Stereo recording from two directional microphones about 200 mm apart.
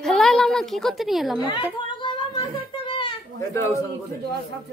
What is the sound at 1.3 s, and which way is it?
Speech, 20° left (ahead or behind).